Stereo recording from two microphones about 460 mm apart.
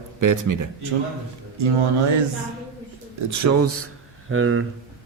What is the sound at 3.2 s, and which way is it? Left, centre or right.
Speech, right.